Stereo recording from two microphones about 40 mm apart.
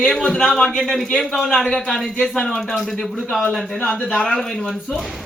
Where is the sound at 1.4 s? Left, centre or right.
Centre.